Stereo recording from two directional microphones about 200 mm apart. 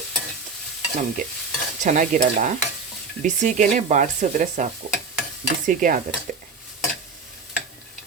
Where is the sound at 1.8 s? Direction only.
40° right (ahead or behind).